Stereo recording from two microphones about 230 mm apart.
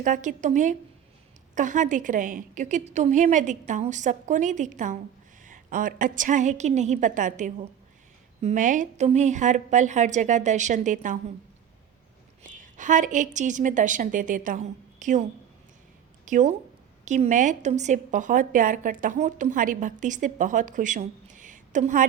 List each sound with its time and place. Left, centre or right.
0.0 s a woman's voice: right
12.4 s a woman's voice: right
16.2 s a woman's voice: right